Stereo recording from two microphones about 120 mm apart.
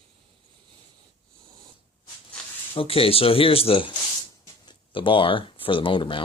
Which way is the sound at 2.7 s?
50° left (ahead or behind).